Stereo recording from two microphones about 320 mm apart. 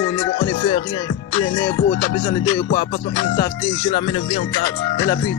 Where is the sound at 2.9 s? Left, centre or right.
Left.